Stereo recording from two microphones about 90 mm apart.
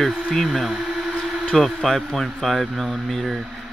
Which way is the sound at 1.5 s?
5° left (ahead or behind).